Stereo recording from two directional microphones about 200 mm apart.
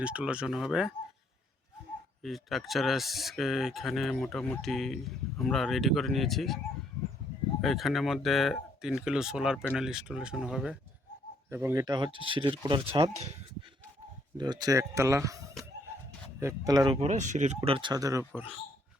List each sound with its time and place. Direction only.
0.0 s speech: 5° right (ahead or behind)
2.2 s speech: centre (ahead or behind)
7.6 s speech: centre (ahead or behind); by 13.4 s 30° right (ahead or behind)
14.3 s speech: 20° right (ahead or behind)
16.4 s speech: 15° right (ahead or behind)